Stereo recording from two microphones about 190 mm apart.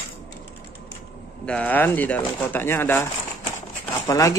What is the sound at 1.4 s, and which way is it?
Speech, 5° left (ahead or behind).